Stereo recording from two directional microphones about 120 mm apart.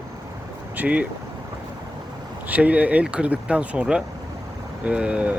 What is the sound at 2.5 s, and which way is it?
Speech, 10° right (ahead or behind).